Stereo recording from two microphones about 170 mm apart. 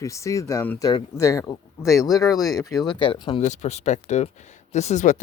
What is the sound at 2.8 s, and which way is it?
Speech, 30° left (ahead or behind).